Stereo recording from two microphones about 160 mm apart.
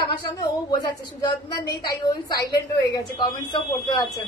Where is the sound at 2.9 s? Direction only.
25° left (ahead or behind).